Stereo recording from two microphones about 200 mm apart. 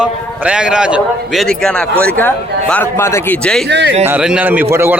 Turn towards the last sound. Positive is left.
turn(degrees=-10)  # may be behind; listen again after turning